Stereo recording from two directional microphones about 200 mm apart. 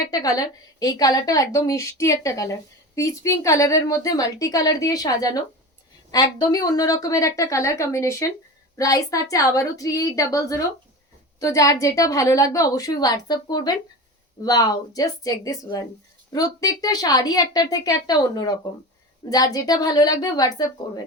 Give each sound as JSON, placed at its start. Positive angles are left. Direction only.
{"t": 0.0, "sound": "a woman's voice", "side_deg": 20}